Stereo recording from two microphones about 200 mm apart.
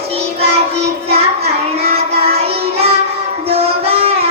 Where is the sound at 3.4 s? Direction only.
30° right (ahead or behind).